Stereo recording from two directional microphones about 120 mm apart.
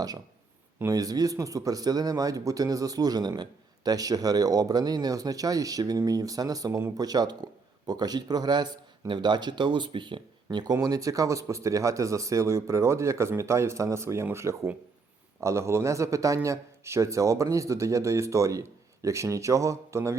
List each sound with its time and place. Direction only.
0.8 s a man's voice: 30° right (ahead or behind)